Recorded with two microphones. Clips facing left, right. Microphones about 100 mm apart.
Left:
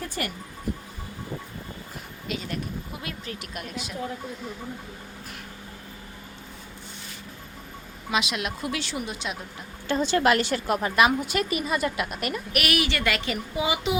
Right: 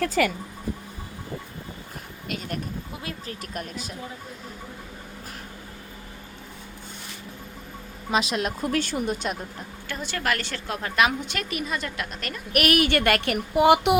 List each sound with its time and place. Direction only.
0.2 s speech: 90° right
2.3 s a woman's voice: 45° right (ahead or behind)
3.0 s speech: 35° right (ahead or behind)
8.1 s a woman's voice: 40° right (ahead or behind)
9.9 s a woman's voice: 25° left (ahead or behind); by 12.4 s 10° left (ahead or behind)
12.5 s a child's voice: 45° right (ahead or behind); by 14.0 s 65° right (ahead or behind)